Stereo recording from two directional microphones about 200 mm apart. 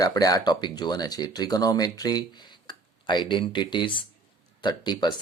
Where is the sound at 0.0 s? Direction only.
15° left (ahead or behind).